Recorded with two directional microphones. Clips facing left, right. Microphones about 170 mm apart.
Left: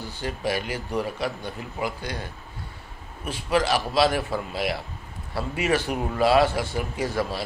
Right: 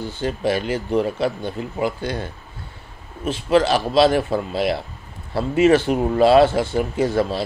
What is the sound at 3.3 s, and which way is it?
Speech, 25° right (ahead or behind).